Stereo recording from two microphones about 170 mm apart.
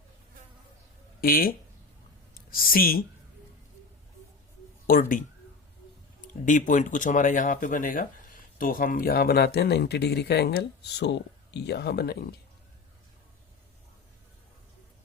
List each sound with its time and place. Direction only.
1.2 s speech: 60° left (ahead or behind)
4.9 s speech: 55° left (ahead or behind)
6.2 s speech: 50° left (ahead or behind); by 12.3 s 70° left (ahead or behind)